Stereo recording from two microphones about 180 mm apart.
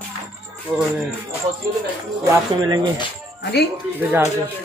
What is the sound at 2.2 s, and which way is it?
Speech, 25° right (ahead or behind).